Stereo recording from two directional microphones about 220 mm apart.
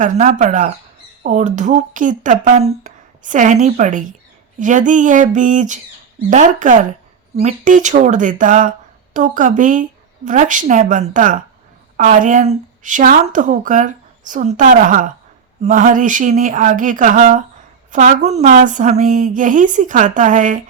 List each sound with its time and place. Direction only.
0.0 s speech: 35° right (ahead or behind)